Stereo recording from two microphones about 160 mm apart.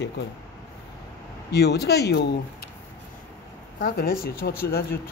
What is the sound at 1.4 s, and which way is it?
Speech, 90° left.